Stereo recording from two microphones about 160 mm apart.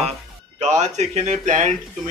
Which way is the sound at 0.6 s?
45° right (ahead or behind).